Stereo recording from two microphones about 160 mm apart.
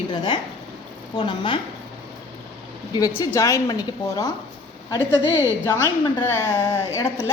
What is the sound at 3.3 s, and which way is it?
Speech, 20° left (ahead or behind).